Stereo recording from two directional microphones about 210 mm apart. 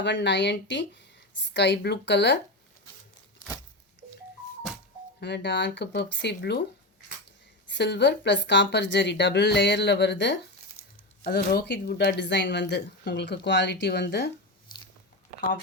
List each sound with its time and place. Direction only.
0.0 s speech: 55° left (ahead or behind)
5.2 s speech: 55° left (ahead or behind)
7.7 s speech: 55° left (ahead or behind)
10.8 s a sound: 90° left
11.2 s speech: 50° left (ahead or behind)